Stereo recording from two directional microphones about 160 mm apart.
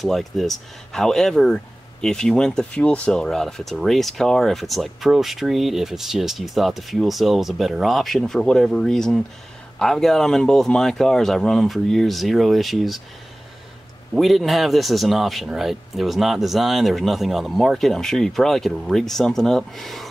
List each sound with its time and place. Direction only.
0.0 s speech: centre (ahead or behind)
14.1 s speech: centre (ahead or behind)